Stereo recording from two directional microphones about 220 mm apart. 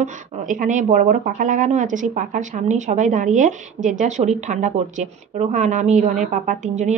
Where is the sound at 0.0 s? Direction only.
35° right (ahead or behind).